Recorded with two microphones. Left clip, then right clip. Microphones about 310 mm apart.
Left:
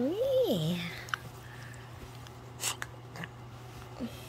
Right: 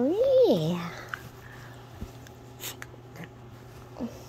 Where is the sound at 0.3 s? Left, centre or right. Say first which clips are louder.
Right 9 dB; centre.